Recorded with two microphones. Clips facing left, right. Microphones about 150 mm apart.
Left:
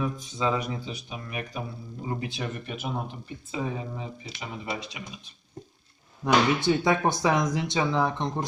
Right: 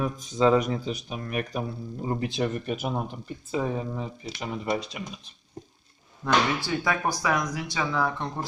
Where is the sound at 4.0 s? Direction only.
45° right (ahead or behind).